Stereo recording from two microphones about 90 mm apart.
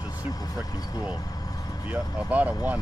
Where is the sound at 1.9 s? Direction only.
15° right (ahead or behind).